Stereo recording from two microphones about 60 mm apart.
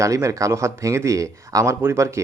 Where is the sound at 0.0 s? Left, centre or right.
Right.